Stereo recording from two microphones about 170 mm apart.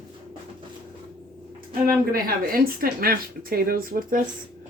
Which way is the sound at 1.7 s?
60° right (ahead or behind).